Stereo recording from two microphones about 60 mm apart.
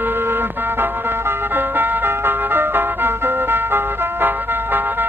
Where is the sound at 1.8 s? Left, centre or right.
Right.